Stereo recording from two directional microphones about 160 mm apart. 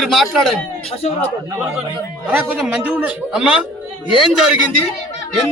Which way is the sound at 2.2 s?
5° right (ahead or behind).